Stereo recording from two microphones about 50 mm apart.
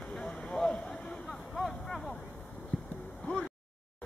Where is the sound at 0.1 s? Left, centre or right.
Centre.